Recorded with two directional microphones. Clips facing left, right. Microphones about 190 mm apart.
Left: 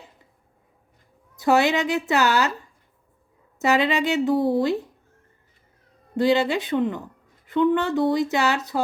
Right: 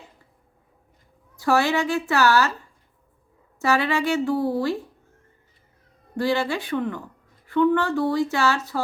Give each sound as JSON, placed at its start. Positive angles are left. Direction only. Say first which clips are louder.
{"t": 1.4, "sound": "speech", "louder": "left 2 dB", "side_deg": 20}
{"t": 3.6, "sound": "speech", "louder": "left 1 dB", "side_deg": 20}
{"t": 6.1, "sound": "speech", "louder": "left 3 dB", "side_deg": 20}